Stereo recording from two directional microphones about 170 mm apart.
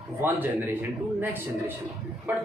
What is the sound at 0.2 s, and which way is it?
Speech, 10° right (ahead or behind).